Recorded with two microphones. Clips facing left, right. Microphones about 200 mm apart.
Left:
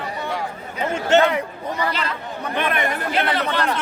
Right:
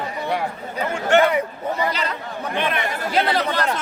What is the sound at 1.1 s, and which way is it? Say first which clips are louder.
Speech: even; 20° left (ahead or behind).